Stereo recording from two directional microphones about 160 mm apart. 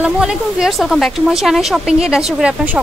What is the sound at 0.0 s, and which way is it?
Speech, 5° right (ahead or behind).